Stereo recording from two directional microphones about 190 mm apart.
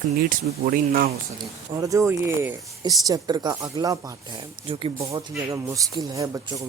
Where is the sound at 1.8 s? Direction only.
15° right (ahead or behind).